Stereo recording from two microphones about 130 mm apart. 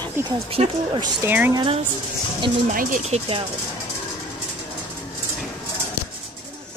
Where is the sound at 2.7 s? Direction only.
90° right.